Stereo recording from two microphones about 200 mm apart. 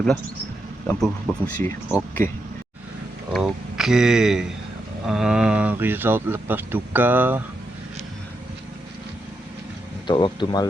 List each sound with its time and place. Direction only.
1.0 s speech: 5° left (ahead or behind)
3.3 s speech: centre (ahead or behind)
10.1 s speech: 20° left (ahead or behind)